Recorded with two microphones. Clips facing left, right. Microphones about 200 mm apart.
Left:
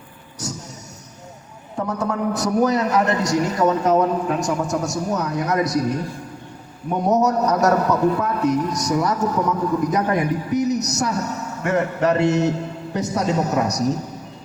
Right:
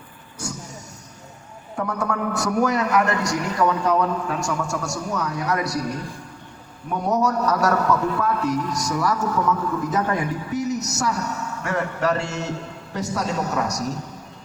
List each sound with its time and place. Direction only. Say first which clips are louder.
1.7 s a man's voice: left 2 dB; 20° left (ahead or behind)